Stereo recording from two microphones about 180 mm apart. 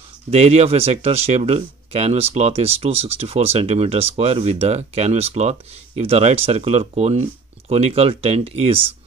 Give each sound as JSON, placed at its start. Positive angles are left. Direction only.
{"t": 0.3, "sound": "speech", "side_deg": -35}